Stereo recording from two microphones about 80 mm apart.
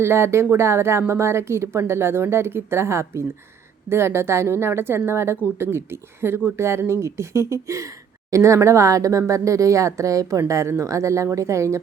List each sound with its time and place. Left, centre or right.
0.0 s speech: right